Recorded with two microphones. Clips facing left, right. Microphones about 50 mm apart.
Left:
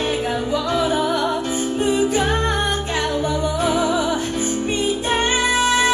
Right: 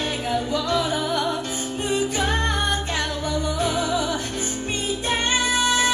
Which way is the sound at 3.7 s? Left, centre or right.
Left.